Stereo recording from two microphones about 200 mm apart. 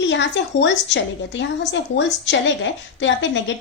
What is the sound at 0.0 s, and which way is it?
A woman's voice, 60° left (ahead or behind).